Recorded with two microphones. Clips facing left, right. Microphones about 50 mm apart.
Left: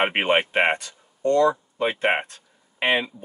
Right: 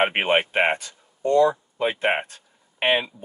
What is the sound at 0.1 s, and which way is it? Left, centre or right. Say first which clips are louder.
Speech: even; centre.